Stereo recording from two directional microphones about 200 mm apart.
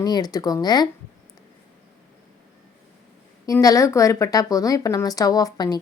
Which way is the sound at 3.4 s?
15° left (ahead or behind).